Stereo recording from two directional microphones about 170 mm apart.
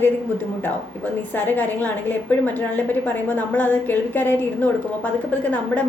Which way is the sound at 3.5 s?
10° left (ahead or behind).